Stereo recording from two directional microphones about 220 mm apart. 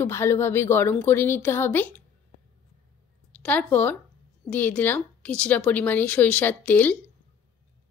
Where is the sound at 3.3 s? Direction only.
5° left (ahead or behind).